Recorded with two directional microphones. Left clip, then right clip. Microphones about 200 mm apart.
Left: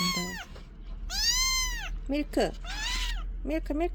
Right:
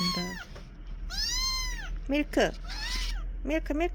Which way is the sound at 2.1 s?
5° left (ahead or behind).